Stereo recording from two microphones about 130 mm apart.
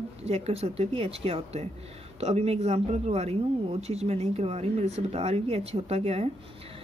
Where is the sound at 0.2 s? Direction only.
50° right (ahead or behind).